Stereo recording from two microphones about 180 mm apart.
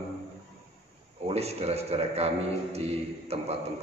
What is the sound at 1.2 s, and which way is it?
A man's voice, 35° right (ahead or behind).